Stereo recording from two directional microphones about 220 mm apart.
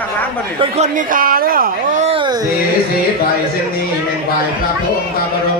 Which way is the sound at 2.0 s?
20° right (ahead or behind).